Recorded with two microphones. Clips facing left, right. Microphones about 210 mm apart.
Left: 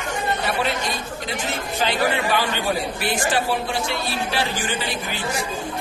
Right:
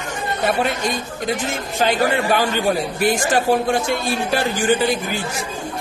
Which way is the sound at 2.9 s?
45° right (ahead or behind).